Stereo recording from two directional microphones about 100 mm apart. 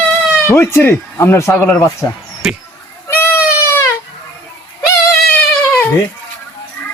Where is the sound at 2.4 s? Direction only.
5° right (ahead or behind).